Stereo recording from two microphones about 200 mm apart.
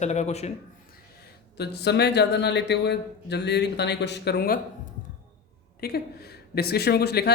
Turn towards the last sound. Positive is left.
turn(degrees=55)  # may be behind; listen again after turning